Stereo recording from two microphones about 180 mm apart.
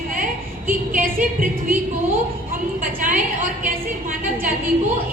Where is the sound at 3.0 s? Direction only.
45° right (ahead or behind).